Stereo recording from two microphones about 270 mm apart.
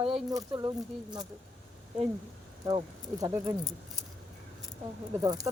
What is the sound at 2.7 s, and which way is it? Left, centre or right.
Speech, centre.